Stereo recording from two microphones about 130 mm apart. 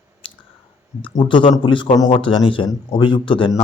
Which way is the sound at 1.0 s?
40° left (ahead or behind).